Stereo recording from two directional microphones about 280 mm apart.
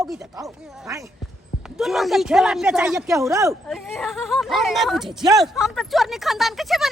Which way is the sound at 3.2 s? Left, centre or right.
Centre.